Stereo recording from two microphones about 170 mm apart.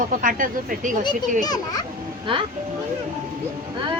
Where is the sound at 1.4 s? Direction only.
25° left (ahead or behind).